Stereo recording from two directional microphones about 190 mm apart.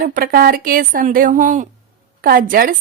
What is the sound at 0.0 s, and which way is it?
A woman's voice, 50° right (ahead or behind).